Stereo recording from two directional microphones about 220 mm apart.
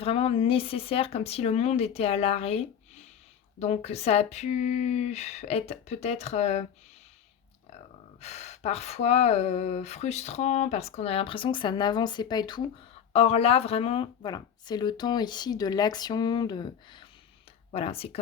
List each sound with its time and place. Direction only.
0.0 s speech: 25° left (ahead or behind)
8.2 s speech: 30° left (ahead or behind)